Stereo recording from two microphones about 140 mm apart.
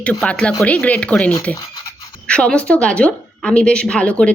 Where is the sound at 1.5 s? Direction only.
30° left (ahead or behind).